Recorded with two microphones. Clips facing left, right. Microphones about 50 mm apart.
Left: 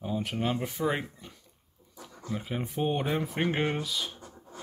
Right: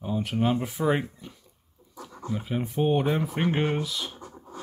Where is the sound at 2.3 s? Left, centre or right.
Centre.